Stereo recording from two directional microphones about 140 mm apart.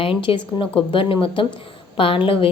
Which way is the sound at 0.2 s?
35° left (ahead or behind).